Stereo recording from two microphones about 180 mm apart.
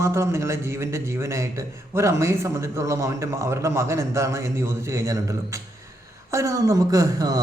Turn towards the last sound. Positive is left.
turn(degrees=-20)  # may be behind; listen again after turning